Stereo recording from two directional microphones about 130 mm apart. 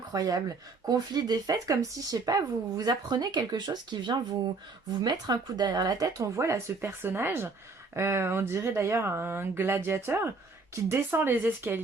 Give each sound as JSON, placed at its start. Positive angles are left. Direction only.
{"t": 0.1, "sound": "speech", "side_deg": -25}